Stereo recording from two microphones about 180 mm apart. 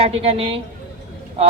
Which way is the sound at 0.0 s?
30° right (ahead or behind).